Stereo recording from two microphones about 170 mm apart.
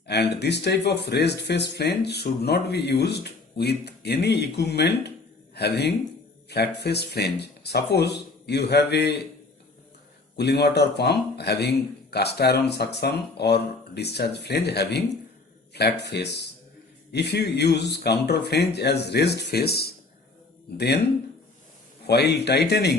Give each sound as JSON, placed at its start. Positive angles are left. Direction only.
{"t": 0.1, "sound": "speech", "side_deg": 80}
{"t": 10.3, "sound": "speech", "side_deg": 75}
{"t": 22.0, "sound": "speech", "side_deg": 75}